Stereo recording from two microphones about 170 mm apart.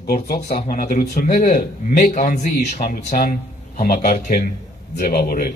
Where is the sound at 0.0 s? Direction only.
65° left (ahead or behind).